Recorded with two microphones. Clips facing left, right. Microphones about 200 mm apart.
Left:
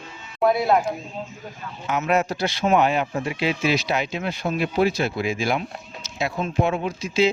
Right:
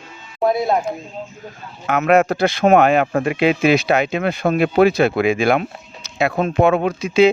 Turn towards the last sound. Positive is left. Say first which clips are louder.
# right 7 dB
turn(degrees=-60)  # may be behind; listen again after turning